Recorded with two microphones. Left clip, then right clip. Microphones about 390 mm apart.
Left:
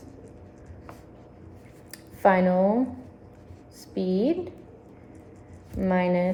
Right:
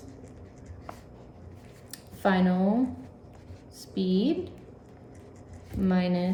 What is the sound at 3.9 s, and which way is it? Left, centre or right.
Speech, centre.